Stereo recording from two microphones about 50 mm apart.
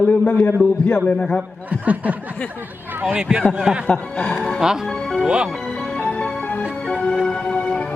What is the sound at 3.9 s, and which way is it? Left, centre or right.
Speech, left.